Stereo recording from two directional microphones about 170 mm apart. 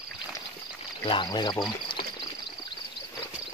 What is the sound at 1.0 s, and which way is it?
Speech, 25° left (ahead or behind).